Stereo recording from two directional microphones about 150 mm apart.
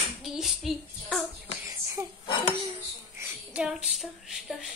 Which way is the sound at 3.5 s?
10° right (ahead or behind).